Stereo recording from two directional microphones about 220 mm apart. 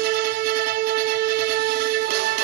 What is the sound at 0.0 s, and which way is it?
Music, 45° right (ahead or behind).